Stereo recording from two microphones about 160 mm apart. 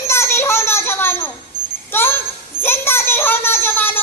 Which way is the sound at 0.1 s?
15° left (ahead or behind).